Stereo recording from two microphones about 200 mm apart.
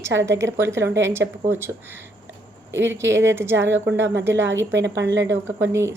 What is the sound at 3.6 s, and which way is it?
A woman's voice, 65° right (ahead or behind).